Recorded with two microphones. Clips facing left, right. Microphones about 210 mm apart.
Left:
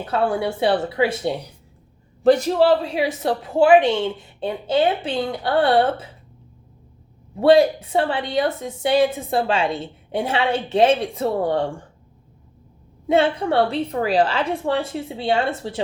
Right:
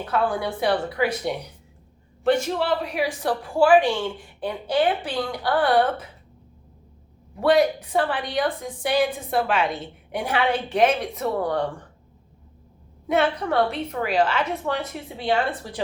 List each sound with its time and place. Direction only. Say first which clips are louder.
0.0 s speech: left 3 dB; 25° left (ahead or behind)
7.3 s speech: left 5 dB; 30° left (ahead or behind)
13.1 s speech: left 4 dB; 25° left (ahead or behind)